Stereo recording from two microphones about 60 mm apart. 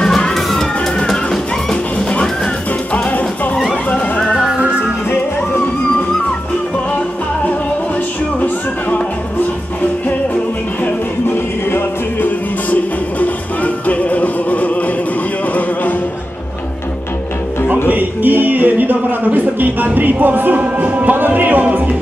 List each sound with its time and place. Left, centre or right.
0.0 s music: centre
4.6 s music: centre
11.2 s music: left
13.8 s music: left
17.8 s music: right